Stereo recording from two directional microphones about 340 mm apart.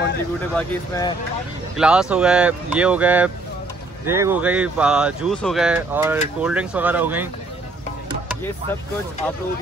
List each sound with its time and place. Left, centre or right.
0.6 s speech: centre
1.8 s speech: centre